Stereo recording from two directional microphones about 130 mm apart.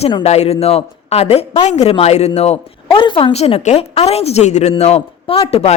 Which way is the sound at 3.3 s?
55° left (ahead or behind).